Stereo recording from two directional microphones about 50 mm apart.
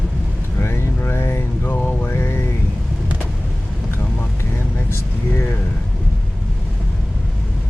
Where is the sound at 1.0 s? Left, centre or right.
Left.